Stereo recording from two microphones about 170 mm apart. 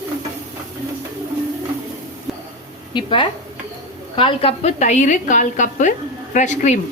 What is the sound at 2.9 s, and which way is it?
A woman's voice, 30° left (ahead or behind).